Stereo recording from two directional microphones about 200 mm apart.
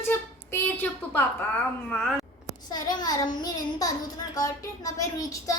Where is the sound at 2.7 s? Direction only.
20° left (ahead or behind).